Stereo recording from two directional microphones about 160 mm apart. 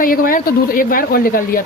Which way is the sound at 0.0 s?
60° left (ahead or behind).